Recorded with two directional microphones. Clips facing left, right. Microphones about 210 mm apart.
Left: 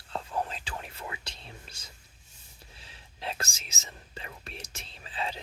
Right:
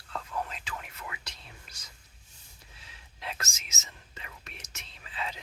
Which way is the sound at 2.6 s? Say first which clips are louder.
Left 3 dB; 30° left (ahead or behind).